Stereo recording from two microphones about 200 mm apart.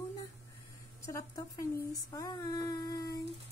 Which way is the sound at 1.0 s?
15° left (ahead or behind).